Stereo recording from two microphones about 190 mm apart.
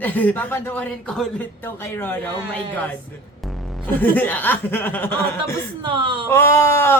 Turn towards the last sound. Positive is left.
turn(degrees=15)  # may be behind; listen again after turning